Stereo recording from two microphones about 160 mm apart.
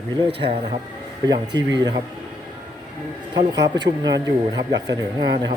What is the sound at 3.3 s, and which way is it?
Speech, 25° right (ahead or behind).